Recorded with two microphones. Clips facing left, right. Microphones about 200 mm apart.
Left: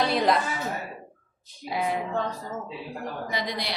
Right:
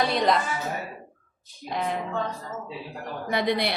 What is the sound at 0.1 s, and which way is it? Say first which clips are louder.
Speech: even; centre (ahead or behind).